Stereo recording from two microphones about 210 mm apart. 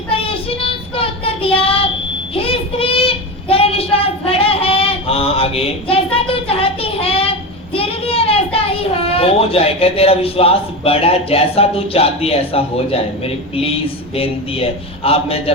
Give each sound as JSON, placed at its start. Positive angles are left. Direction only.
{"t": 0.1, "sound": "child singing", "side_deg": 25}